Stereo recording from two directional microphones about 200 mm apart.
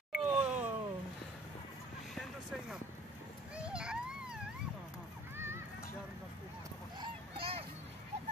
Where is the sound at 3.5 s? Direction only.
5° right (ahead or behind).